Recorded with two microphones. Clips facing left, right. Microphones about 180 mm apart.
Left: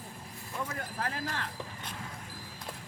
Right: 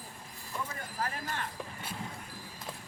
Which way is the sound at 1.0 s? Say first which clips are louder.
Right 1 dB; 85° left.